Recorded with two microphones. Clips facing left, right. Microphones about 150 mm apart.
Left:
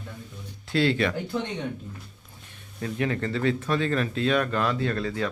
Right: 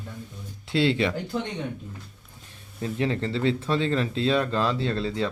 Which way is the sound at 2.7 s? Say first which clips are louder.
Right 1 dB; 25° right (ahead or behind).